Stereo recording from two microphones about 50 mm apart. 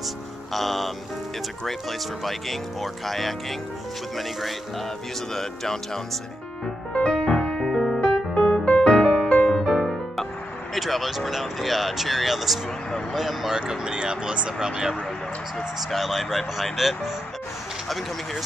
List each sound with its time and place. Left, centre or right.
0.5 s speech: centre
6.9 s music: centre
10.7 s speech: centre
13.6 s speech: centre
15.9 s speech: centre